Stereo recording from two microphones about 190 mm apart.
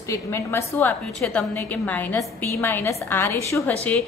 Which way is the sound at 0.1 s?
15° left (ahead or behind).